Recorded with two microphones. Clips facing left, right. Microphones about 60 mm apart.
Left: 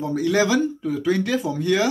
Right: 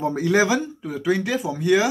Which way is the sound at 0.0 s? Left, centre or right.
Right.